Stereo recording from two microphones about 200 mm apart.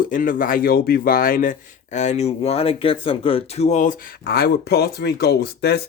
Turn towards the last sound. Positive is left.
turn(degrees=50)  # may be behind; listen again after turning